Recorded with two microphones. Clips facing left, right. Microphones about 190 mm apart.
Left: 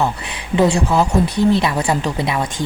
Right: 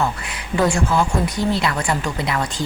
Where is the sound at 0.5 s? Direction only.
20° left (ahead or behind).